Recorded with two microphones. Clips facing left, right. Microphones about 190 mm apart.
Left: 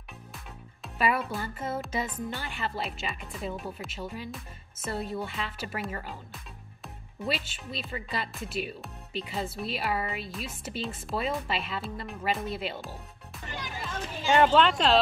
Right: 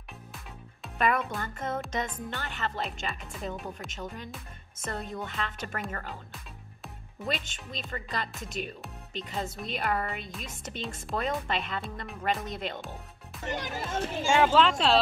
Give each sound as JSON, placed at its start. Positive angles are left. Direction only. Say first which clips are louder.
{"t": 0.8, "sound": "a child's voice", "louder": "even", "side_deg": 5}
{"t": 13.5, "sound": "a child's voice", "louder": "right 5 dB", "side_deg": -45}
{"t": 14.4, "sound": "speech", "louder": "left 1 dB", "side_deg": 0}